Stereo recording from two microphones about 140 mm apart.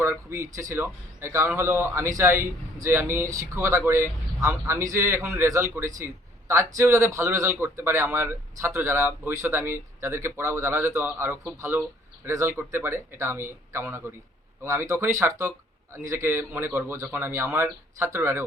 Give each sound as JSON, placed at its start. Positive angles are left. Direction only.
{"t": 0.0, "sound": "speech", "side_deg": -20}